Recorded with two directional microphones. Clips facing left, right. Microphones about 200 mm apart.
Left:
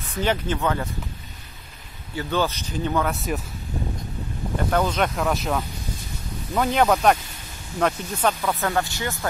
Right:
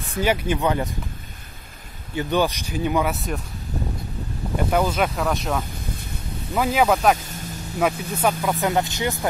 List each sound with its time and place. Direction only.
0.1 s speech: 10° right (ahead or behind)
2.1 s speech: 15° right (ahead or behind)
4.6 s speech: 10° right (ahead or behind)
5.7 s a sound: 55° right (ahead or behind)
6.5 s speech: 5° right (ahead or behind)